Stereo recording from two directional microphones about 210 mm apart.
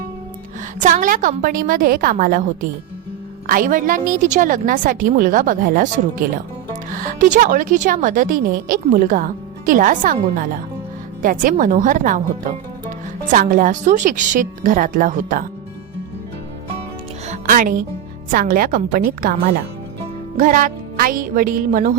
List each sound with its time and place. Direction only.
0.8 s a woman's voice: 40° right (ahead or behind)
6.9 s a woman's voice: 40° right (ahead or behind)
17.2 s music: 35° right (ahead or behind)
18.3 s a woman's voice: 40° right (ahead or behind)